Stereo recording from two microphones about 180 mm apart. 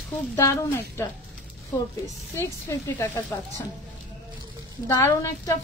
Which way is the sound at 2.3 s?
15° left (ahead or behind).